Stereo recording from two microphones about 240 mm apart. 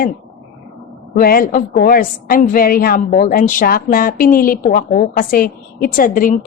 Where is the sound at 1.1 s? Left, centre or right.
Left.